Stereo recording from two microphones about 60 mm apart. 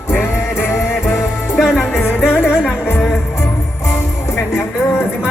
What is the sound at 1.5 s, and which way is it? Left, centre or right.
Music, centre.